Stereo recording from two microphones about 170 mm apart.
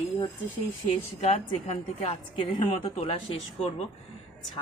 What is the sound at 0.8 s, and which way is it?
Speech, 40° left (ahead or behind).